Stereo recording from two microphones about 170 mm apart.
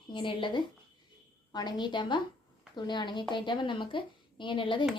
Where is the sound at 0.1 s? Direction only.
30° left (ahead or behind).